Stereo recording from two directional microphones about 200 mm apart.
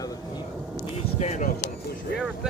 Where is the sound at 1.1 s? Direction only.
35° left (ahead or behind).